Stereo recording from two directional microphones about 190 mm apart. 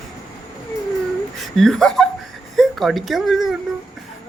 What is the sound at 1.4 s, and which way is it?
Speech, centre (ahead or behind).